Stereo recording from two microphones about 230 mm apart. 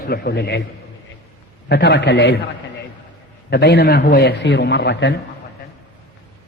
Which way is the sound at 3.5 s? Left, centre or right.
Left.